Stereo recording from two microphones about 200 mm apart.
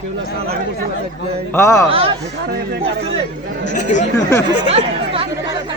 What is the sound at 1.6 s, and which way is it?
Speech, 15° left (ahead or behind).